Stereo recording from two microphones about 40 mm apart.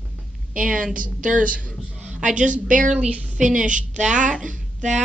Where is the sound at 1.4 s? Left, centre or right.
Right.